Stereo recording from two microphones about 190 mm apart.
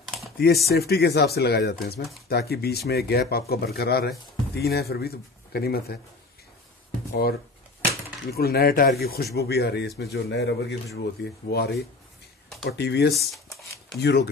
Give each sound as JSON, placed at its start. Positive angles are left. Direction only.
{"t": 0.0, "sound": "a sound", "side_deg": 0}
{"t": 0.7, "sound": "speech", "side_deg": 55}
{"t": 7.1, "sound": "speech", "side_deg": 55}
{"t": 13.1, "sound": "shuffling cards", "side_deg": 0}
{"t": 14.0, "sound": "speech", "side_deg": 60}